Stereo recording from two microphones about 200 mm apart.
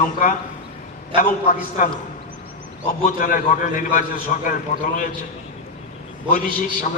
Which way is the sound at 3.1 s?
45° left (ahead or behind).